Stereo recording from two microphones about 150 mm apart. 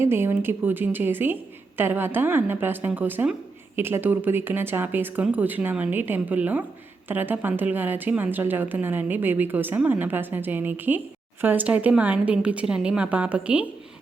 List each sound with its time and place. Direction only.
0.0 s a woman's voice: 15° right (ahead or behind)